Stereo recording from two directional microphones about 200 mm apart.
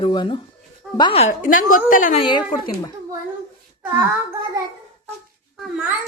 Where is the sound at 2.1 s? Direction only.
25° left (ahead or behind).